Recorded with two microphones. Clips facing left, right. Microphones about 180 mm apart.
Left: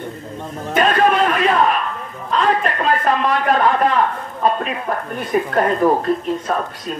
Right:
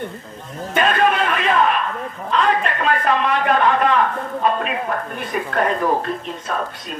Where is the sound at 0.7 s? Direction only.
35° left (ahead or behind).